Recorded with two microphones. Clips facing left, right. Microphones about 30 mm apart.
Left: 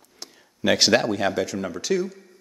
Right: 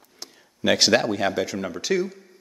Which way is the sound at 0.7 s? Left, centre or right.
Centre.